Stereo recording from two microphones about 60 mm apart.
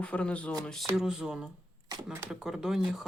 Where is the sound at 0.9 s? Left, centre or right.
Centre.